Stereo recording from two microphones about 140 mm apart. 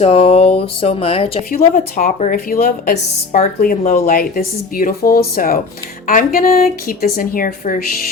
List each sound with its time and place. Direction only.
0.0 s speech: 45° left (ahead or behind)
1.5 s a woman's voice: 75° left (ahead or behind); by 2.9 s 90° left
3.3 s a woman's voice: 80° left